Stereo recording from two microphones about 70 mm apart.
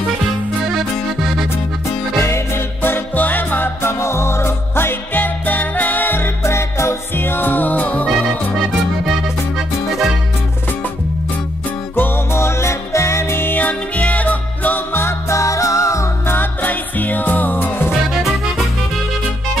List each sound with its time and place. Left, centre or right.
0.7 s music: centre
2.1 s music: left
9.6 s music: centre
11.9 s music: left
16.3 s music: left